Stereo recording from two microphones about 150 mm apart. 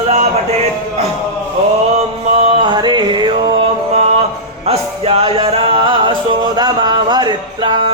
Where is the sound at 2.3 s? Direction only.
40° right (ahead or behind).